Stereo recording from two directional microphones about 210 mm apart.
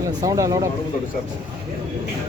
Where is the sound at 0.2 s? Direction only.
15° right (ahead or behind).